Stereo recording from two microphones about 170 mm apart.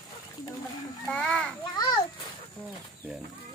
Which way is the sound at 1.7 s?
25° left (ahead or behind).